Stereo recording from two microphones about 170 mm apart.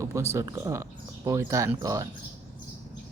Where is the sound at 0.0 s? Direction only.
15° right (ahead or behind).